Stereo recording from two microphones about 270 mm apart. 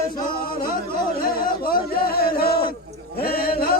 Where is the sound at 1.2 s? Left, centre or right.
Left.